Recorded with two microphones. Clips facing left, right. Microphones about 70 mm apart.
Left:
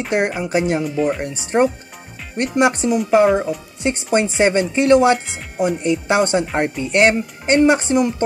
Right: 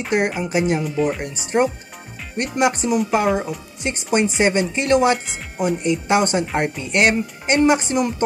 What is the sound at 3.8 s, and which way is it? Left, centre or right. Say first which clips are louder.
Speech: left 2 dB; left.